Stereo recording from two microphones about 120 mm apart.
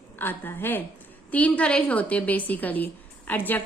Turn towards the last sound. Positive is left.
turn(degrees=15)  # may be behind; listen again after turning